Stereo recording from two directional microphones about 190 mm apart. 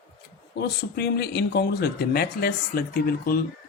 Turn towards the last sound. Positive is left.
turn(degrees=50)  # may be behind; listen again after turning